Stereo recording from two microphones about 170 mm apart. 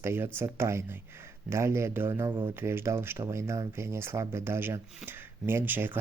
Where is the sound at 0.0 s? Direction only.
15° right (ahead or behind).